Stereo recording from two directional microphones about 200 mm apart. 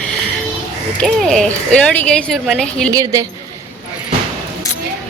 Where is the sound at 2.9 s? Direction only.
15° right (ahead or behind).